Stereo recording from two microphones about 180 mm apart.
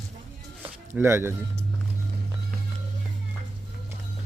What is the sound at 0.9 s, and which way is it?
Speech, 15° right (ahead or behind).